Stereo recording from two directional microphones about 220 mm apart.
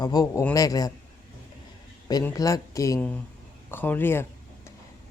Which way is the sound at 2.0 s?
15° left (ahead or behind).